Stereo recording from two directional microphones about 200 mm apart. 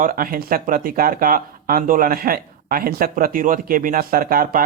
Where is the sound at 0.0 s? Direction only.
45° right (ahead or behind).